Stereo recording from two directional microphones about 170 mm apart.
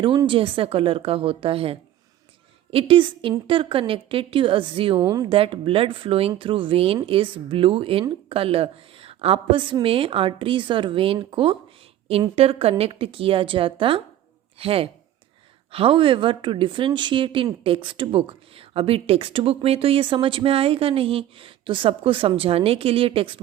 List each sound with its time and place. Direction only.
0.0 s a woman's voice: 30° right (ahead or behind)